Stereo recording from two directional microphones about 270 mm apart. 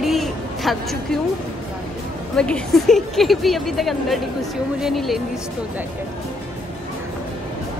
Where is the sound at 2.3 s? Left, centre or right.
Centre.